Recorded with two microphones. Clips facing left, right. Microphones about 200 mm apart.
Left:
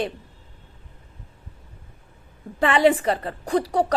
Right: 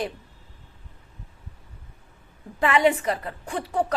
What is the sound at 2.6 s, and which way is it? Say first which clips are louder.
A woman's voice: left 3 dB; 30° left (ahead or behind).